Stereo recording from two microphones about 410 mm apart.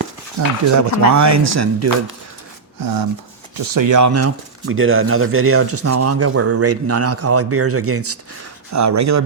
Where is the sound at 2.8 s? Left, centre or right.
Right.